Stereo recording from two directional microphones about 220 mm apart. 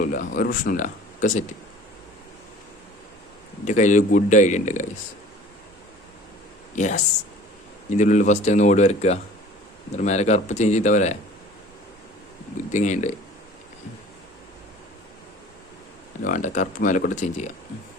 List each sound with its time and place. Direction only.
0.0 s speech: 40° left (ahead or behind)
3.7 s speech: 35° left (ahead or behind)
6.7 s speech: 35° left (ahead or behind)
12.5 s speech: 35° left (ahead or behind)
16.2 s speech: 35° left (ahead or behind)